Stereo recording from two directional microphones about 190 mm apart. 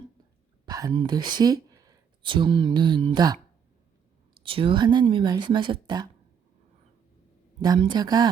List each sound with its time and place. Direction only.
0.6 s a sound: 20° right (ahead or behind)
0.9 s speech: 20° right (ahead or behind)
4.4 s speech: 30° right (ahead or behind)
7.6 s speech: 25° right (ahead or behind)